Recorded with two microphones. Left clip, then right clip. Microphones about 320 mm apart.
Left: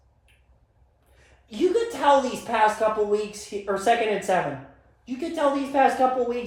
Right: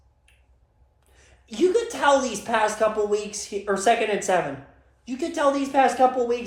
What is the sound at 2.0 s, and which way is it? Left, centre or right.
Speech, right.